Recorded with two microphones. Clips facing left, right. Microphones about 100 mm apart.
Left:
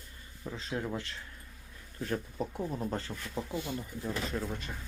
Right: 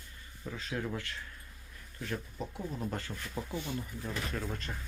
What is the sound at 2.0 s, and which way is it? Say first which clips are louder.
Speech: left 4 dB; 35° left (ahead or behind).